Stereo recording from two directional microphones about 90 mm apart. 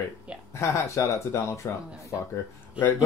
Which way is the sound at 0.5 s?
35° left (ahead or behind).